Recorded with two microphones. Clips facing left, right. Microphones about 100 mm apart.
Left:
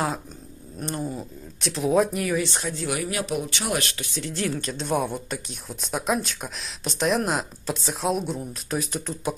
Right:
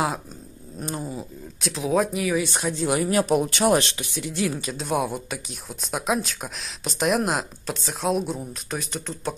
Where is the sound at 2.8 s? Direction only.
35° right (ahead or behind).